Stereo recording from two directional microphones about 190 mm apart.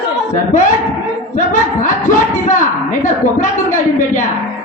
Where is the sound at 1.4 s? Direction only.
40° left (ahead or behind).